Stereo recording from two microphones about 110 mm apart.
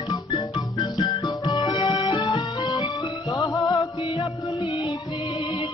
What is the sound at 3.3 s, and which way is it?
Music, 30° left (ahead or behind).